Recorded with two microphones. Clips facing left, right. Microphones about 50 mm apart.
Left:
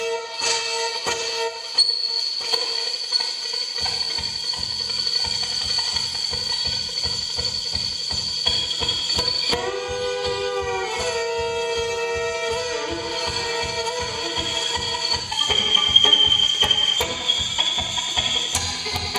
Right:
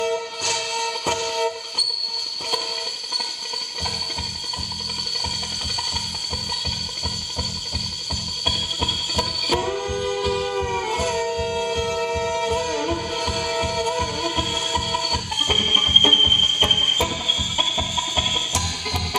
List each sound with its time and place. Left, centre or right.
1.0 s music: centre
9.1 s music: centre
9.6 s music: centre
11.4 s music: centre
11.7 s music: centre
12.4 s music: centre
13.7 s music: centre